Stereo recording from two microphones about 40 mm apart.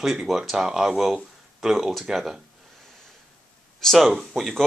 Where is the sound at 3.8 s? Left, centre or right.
Centre.